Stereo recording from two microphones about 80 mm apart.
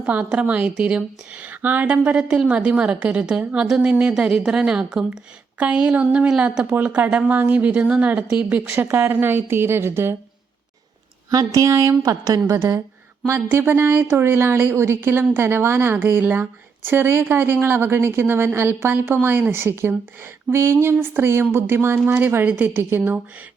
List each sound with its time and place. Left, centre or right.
0.0 s a woman's voice: centre
8.7 s a woman's voice: right
11.3 s a woman's voice: right